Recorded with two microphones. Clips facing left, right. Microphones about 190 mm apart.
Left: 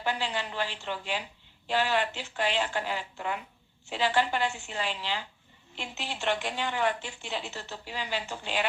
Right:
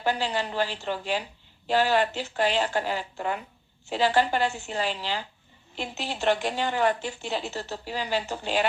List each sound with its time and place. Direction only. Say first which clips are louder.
0.0 s a woman's voice: right 5 dB; 40° right (ahead or behind)